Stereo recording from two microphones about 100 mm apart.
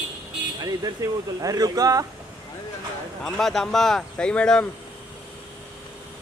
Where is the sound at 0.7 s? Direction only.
40° right (ahead or behind).